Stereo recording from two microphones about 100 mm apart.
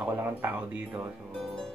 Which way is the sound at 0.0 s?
20° right (ahead or behind).